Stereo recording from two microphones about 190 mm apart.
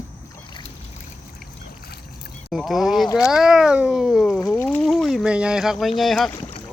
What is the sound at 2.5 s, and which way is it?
Speech, centre (ahead or behind).